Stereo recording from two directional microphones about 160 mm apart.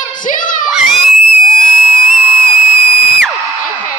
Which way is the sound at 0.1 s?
55° left (ahead or behind).